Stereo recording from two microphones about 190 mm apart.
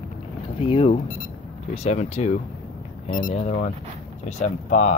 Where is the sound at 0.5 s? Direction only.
30° left (ahead or behind).